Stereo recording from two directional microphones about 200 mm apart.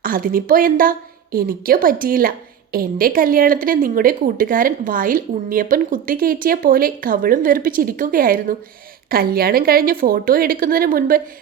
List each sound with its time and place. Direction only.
0.0 s speech: 45° right (ahead or behind)